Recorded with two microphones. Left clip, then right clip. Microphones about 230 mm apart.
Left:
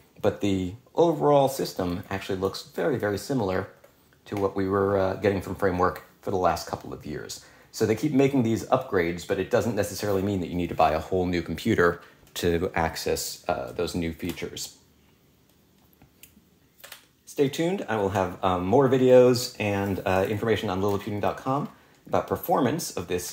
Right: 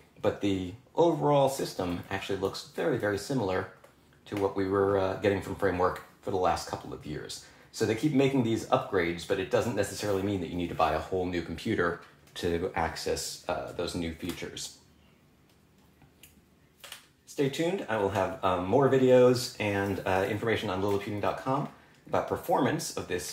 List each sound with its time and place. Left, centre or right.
0.2 s speech: left
17.4 s speech: left